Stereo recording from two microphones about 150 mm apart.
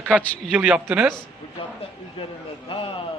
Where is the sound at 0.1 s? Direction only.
5° left (ahead or behind).